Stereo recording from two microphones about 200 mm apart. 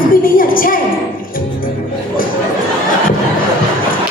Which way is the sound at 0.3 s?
45° left (ahead or behind).